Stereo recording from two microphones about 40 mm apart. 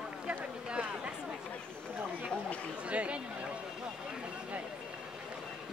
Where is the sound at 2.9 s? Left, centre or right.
Right.